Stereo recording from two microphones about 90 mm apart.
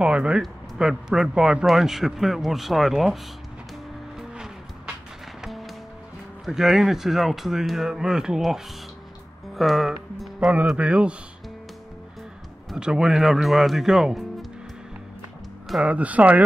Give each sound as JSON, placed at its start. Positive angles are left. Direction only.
{"t": 0.0, "sound": "speech", "side_deg": -10}
{"t": 4.2, "sound": "music", "side_deg": -5}
{"t": 6.4, "sound": "speech", "side_deg": -5}
{"t": 12.7, "sound": "speech", "side_deg": -10}
{"t": 15.8, "sound": "speech", "side_deg": -15}